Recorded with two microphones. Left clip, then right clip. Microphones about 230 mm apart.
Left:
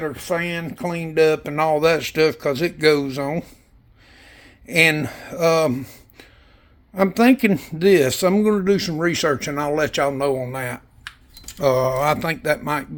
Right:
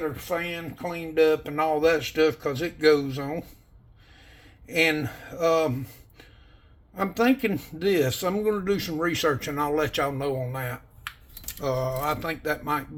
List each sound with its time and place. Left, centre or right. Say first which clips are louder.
0.0 s speech: left 5 dB; left
11.6 s mantra: left 9 dB; left